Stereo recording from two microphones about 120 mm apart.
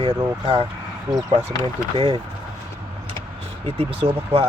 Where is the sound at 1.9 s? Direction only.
50° right (ahead or behind).